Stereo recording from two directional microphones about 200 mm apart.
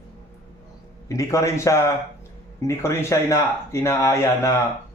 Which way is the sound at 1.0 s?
15° left (ahead or behind).